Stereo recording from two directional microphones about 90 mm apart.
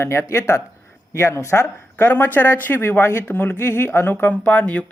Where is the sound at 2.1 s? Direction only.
20° left (ahead or behind).